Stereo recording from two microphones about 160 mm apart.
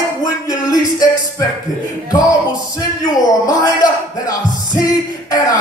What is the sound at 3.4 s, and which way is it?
Music, 25° left (ahead or behind).